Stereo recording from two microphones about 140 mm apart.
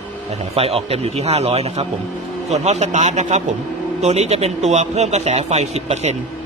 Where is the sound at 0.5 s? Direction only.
45° right (ahead or behind).